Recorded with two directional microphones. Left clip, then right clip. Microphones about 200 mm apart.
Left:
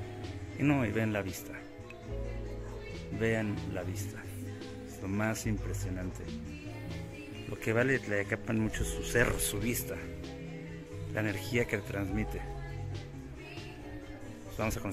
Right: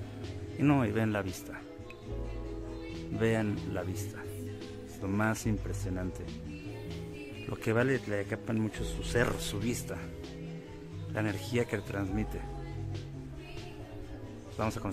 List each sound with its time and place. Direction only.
0.6 s speech: 15° right (ahead or behind)
3.2 s speech: 15° right (ahead or behind)
5.0 s speech: 15° right (ahead or behind)
7.4 s speech: 15° right (ahead or behind)
11.1 s speech: 10° right (ahead or behind)
14.6 s speech: 10° right (ahead or behind)